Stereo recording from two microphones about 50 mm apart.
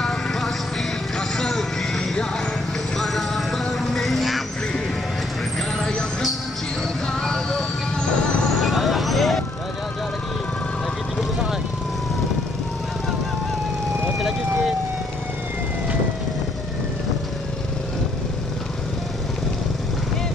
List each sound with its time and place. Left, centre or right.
0.0 s vehicle: centre
1.3 s a sound: centre
3.0 s music: centre
5.8 s music: centre
7.1 s vehicle: centre
8.5 s vehicle: centre
14.1 s vehicle: centre